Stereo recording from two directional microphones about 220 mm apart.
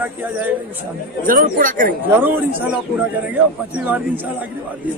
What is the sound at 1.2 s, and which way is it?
Speech, 40° right (ahead or behind).